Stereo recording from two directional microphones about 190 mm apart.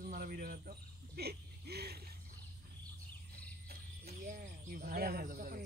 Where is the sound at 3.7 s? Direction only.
55° right (ahead or behind).